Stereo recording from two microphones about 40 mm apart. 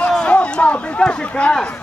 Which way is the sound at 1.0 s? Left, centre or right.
Left.